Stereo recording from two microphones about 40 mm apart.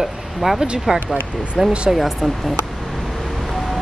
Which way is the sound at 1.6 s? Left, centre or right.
Centre.